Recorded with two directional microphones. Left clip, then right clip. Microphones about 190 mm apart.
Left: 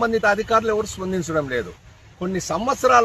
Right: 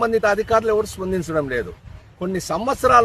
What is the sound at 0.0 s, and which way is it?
A man's voice, 25° right (ahead or behind).